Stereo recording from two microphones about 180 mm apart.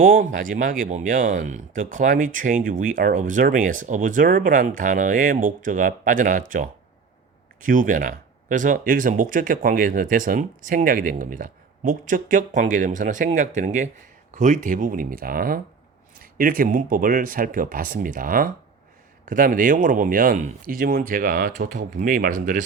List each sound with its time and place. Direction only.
0.0 s speech: 50° right (ahead or behind)
7.6 s speech: 50° right (ahead or behind)